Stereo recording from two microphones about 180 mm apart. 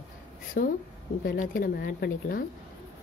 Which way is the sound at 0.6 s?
50° left (ahead or behind).